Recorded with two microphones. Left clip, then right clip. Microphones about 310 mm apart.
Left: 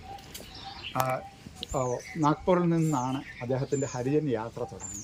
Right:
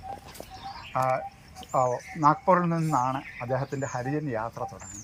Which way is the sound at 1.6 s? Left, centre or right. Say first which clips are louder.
Right 6 dB; centre.